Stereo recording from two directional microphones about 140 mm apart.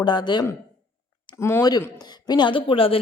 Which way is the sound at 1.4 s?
20° left (ahead or behind).